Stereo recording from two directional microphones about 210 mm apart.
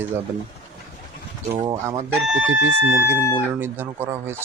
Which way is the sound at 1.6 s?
20° right (ahead or behind).